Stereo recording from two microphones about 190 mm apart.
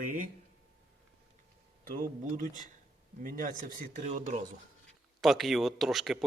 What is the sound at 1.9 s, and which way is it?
Speech, 45° right (ahead or behind).